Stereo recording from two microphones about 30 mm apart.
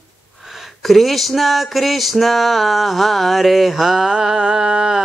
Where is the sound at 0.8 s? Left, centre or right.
Centre.